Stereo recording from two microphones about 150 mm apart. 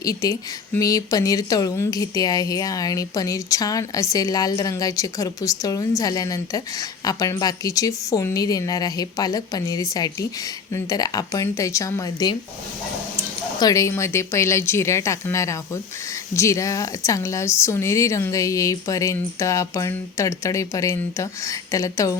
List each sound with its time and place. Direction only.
0.0 s speech: 25° left (ahead or behind)
13.6 s speech: 25° left (ahead or behind)